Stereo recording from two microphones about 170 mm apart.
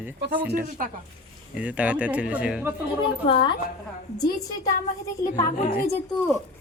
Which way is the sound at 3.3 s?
30° left (ahead or behind).